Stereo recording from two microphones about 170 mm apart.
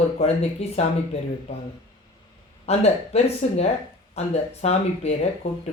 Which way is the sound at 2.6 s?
40° left (ahead or behind).